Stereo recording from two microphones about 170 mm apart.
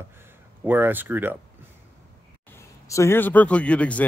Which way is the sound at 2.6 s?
15° left (ahead or behind).